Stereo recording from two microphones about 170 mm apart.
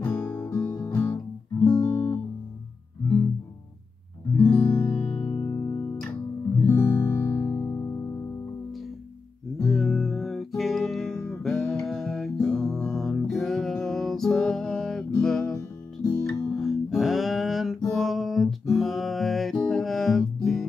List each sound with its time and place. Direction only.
0.0 s music: 10° left (ahead or behind)
4.4 s music: 10° left (ahead or behind)
5.2 s music: 30° left (ahead or behind); by 8.0 s 15° left (ahead or behind)
9.7 s music: centre (ahead or behind)